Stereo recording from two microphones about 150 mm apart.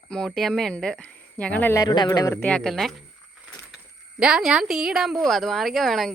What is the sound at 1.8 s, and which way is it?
Speech, 25° left (ahead or behind).